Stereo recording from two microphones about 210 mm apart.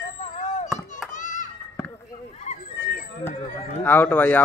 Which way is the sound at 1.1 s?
35° left (ahead or behind).